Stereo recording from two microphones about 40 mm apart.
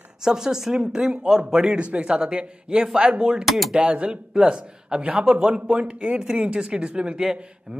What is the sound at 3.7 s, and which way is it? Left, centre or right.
Speech, right.